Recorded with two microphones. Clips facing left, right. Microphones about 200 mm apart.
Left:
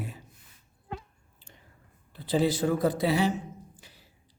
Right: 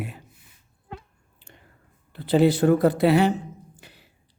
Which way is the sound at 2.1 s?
65° right (ahead or behind).